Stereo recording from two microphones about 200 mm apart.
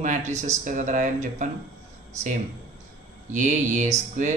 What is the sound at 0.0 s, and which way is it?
Speech, 35° right (ahead or behind).